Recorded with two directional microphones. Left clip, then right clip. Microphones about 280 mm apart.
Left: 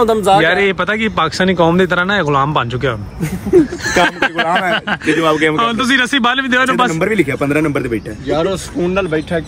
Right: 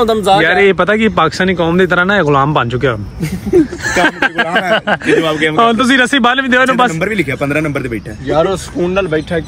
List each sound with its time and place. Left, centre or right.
0.0 s speech: centre
4.0 s speech: centre
8.5 s speech: right